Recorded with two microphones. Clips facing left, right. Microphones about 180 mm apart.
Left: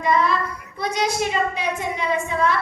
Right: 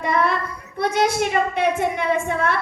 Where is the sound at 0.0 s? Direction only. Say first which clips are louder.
Left 1 dB; 60° right (ahead or behind).